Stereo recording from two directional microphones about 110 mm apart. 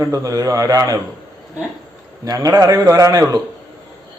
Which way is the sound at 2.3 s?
35° right (ahead or behind).